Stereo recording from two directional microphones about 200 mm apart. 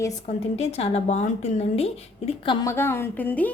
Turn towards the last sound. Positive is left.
turn(degrees=10)  # may be behind; listen again after turning